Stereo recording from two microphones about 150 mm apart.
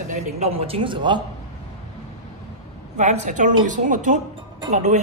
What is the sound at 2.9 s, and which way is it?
A woman's voice, 50° right (ahead or behind).